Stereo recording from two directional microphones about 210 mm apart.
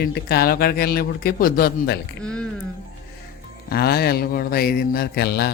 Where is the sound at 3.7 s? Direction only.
45° left (ahead or behind).